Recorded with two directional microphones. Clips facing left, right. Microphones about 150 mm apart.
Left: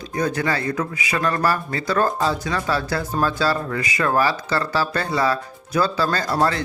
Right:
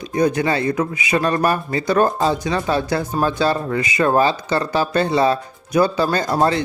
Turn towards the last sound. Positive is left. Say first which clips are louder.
# right 3 dB
turn(degrees=-20)  # may be behind; listen again after turning